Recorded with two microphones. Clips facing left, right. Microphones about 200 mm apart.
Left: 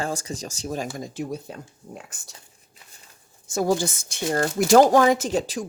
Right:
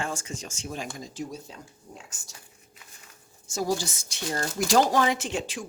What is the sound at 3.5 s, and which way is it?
A woman's voice, 55° left (ahead or behind).